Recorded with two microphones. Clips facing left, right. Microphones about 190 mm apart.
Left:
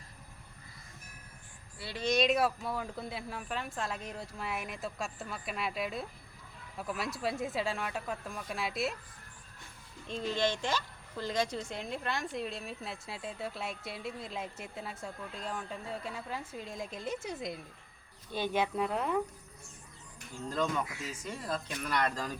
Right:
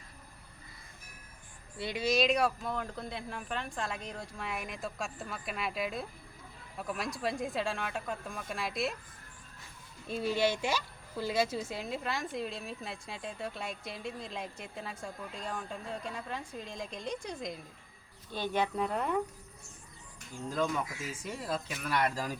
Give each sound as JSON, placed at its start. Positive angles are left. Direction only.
{"t": 1.8, "sound": "speech", "side_deg": -15}
{"t": 2.0, "sound": "a woman's voice", "side_deg": 0}
{"t": 10.1, "sound": "a woman's voice", "side_deg": -10}
{"t": 20.5, "sound": "a woman's voice", "side_deg": -5}